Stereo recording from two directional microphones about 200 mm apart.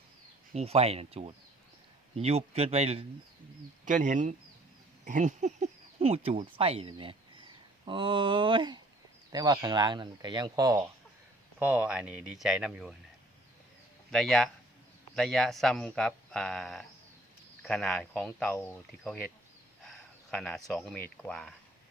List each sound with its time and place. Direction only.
0.5 s a man's voice: 30° right (ahead or behind)
11.6 s speech: 5° right (ahead or behind)
14.1 s speech: centre (ahead or behind)
19.8 s speech: centre (ahead or behind)